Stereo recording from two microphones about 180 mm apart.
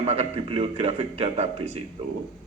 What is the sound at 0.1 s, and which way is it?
A man's voice, 35° right (ahead or behind).